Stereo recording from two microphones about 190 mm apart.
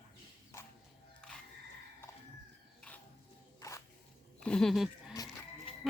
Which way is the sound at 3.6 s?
15° left (ahead or behind).